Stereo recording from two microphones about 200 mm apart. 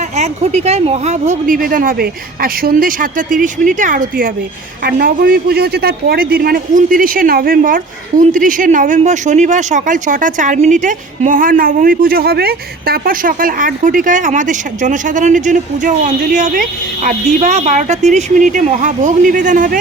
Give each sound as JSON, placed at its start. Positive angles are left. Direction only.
{"t": 0.2, "sound": "a man's voice", "side_deg": -35}